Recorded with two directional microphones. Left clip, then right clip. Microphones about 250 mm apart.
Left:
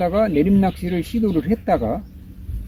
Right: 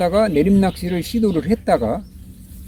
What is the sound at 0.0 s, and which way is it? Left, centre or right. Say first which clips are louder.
Speech: right 2 dB; right.